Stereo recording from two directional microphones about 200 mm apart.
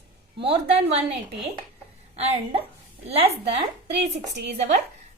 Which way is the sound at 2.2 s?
30° right (ahead or behind).